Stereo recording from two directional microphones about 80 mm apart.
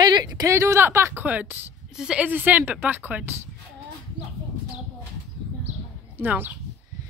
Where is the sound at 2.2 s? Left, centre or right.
Right.